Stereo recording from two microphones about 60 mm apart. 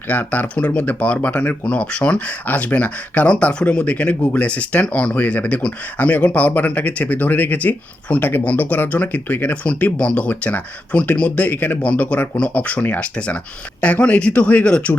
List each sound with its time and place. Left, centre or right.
0.1 s speech: left